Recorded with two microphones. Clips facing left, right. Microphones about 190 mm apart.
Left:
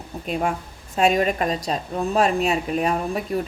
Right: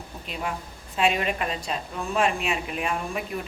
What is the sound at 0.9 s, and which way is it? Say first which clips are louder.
Speech: left 5 dB; 40° left (ahead or behind).